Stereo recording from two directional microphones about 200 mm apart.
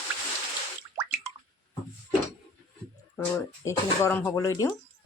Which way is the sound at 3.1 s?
10° left (ahead or behind).